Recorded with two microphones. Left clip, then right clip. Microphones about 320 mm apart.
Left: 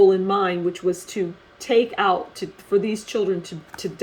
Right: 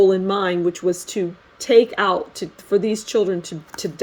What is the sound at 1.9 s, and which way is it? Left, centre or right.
Speech, right.